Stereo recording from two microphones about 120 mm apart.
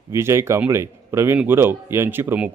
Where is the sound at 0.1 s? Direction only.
20° right (ahead or behind).